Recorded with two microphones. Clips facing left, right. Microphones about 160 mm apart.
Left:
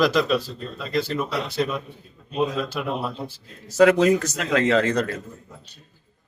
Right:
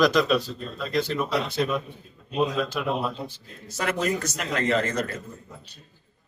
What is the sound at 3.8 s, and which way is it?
Speech, 75° left (ahead or behind).